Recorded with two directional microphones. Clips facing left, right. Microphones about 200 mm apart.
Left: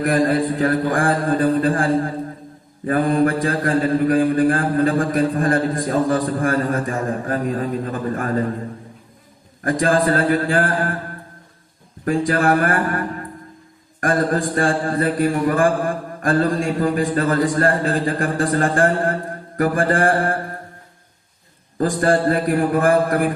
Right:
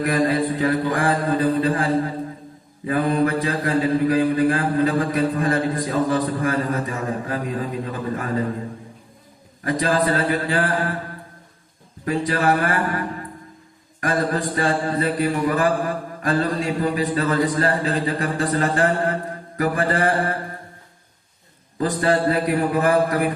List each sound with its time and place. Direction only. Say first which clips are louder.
0.0 s mantra: left 2 dB; 50° left (ahead or behind)
9.6 s mantra: left 3 dB; 50° left (ahead or behind)
12.0 s mantra: left 3 dB; 50° left (ahead or behind)
14.0 s mantra: left 3 dB; 50° left (ahead or behind)
21.8 s mantra: left 2 dB; 45° left (ahead or behind)